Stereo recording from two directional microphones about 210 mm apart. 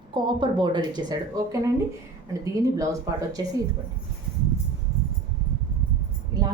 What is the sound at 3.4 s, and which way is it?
Speech, 15° right (ahead or behind).